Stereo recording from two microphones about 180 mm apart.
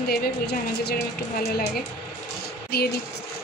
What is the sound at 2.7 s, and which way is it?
Speech, 60° left (ahead or behind).